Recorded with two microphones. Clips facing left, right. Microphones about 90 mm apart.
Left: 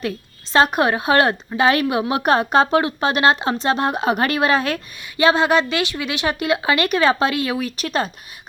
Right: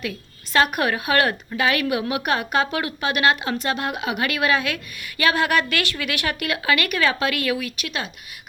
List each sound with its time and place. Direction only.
0.5 s a woman's voice: 30° left (ahead or behind)
5.1 s speech: 25° left (ahead or behind)